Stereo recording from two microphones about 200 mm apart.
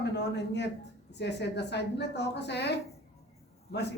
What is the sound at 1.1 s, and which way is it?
A woman's voice, 60° left (ahead or behind).